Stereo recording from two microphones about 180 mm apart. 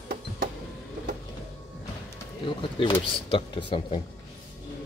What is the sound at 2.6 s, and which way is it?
Speech, 30° left (ahead or behind).